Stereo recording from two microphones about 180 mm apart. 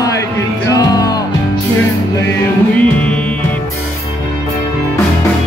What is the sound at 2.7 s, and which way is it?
Music, 5° left (ahead or behind).